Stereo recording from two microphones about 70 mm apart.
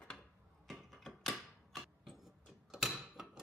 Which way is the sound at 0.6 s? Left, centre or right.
Centre.